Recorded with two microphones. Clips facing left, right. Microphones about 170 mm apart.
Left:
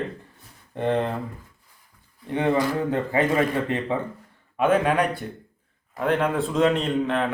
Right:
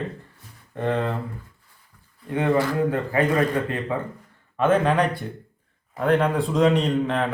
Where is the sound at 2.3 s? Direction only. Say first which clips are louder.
Right 1 dB; 20° left (ahead or behind).